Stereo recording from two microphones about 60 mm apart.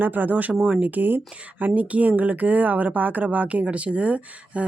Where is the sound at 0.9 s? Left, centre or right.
Right.